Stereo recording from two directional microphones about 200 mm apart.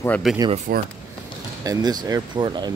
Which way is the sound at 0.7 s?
50° right (ahead or behind).